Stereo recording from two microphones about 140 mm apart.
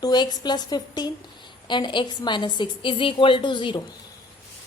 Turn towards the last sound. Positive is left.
turn(degrees=35)  # may be behind; listen again after turning